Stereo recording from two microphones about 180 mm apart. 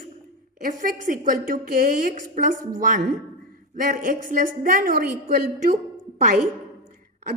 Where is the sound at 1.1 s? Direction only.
50° right (ahead or behind).